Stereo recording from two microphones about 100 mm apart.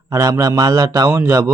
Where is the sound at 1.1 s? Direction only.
30° right (ahead or behind).